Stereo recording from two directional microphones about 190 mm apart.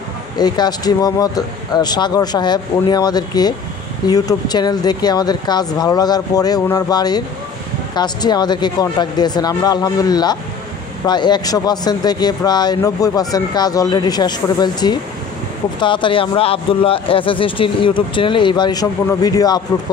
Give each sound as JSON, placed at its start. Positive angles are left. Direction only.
{"t": 0.4, "sound": "speech", "side_deg": 20}